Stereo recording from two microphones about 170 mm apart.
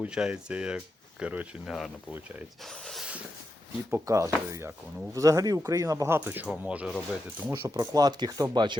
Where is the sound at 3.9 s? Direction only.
20° right (ahead or behind).